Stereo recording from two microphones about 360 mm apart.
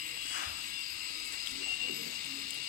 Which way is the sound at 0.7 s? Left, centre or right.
Right.